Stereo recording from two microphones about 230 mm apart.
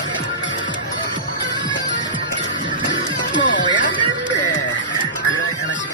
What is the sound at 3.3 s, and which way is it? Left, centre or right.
Music, left.